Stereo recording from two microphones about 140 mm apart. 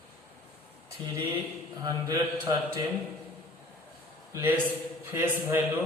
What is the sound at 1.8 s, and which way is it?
Speech, 25° right (ahead or behind).